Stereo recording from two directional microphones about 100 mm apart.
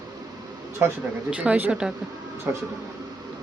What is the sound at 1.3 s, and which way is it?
Speech, 15° right (ahead or behind).